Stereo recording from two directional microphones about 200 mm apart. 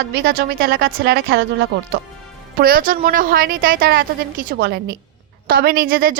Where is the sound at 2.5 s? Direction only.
45° right (ahead or behind).